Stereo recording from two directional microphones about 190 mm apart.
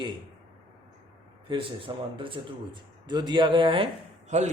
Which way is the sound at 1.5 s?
25° right (ahead or behind).